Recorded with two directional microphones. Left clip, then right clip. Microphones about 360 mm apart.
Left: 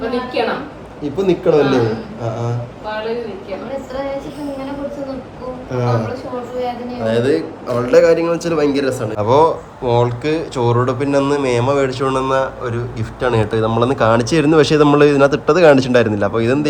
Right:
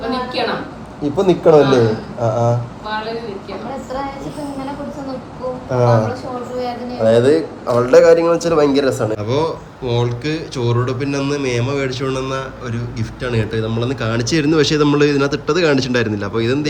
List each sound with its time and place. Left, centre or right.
1.1 s a man's voice: centre
5.7 s a man's voice: centre